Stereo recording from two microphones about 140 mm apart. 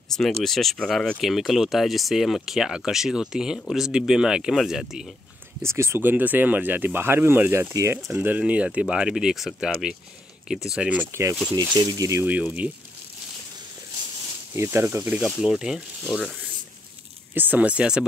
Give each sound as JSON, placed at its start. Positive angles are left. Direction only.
{"t": 0.2, "sound": "speech", "side_deg": 0}
{"t": 5.6, "sound": "speech", "side_deg": -20}
{"t": 11.7, "sound": "speech", "side_deg": -30}
{"t": 14.5, "sound": "speech", "side_deg": -20}
{"t": 17.3, "sound": "speech", "side_deg": -15}